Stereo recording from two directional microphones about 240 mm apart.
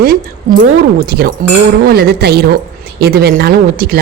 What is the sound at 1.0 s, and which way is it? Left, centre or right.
Speech, right.